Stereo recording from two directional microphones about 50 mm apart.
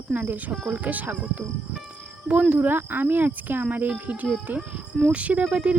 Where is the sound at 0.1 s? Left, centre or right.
Right.